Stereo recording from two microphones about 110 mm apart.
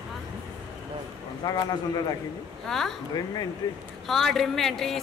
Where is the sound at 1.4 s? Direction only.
35° left (ahead or behind).